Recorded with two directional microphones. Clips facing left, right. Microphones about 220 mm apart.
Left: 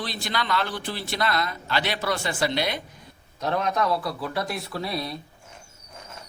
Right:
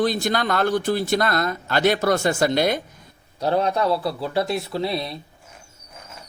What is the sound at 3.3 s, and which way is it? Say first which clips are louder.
A man's voice: right 4 dB; 30° right (ahead or behind).